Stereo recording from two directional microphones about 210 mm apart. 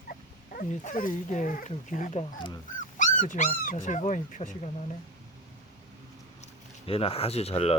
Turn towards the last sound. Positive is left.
turn(degrees=30)  # may be behind; listen again after turning